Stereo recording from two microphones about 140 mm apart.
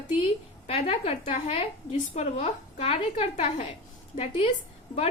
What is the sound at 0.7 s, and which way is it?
A woman's voice, 45° left (ahead or behind).